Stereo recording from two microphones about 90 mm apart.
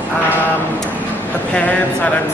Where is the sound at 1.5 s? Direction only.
15° left (ahead or behind).